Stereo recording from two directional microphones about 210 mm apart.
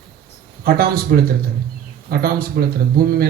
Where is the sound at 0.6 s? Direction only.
45° right (ahead or behind).